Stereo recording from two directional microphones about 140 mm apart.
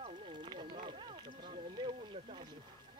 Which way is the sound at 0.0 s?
35° right (ahead or behind).